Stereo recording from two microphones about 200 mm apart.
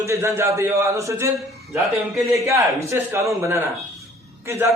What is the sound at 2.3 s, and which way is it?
A man's voice, 15° right (ahead or behind).